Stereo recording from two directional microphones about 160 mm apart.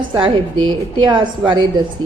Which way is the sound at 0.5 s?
30° right (ahead or behind).